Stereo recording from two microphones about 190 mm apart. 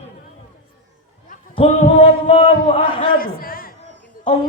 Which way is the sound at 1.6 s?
35° left (ahead or behind).